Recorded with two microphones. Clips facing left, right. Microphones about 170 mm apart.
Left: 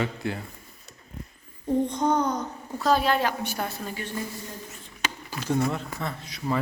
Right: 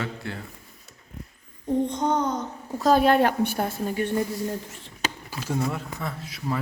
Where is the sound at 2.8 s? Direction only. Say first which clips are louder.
Right 4 dB; 50° right (ahead or behind).